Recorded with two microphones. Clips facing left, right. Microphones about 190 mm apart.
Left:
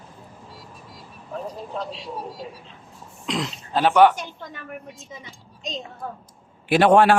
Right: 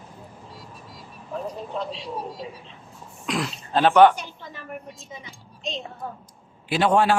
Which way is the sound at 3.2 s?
20° left (ahead or behind).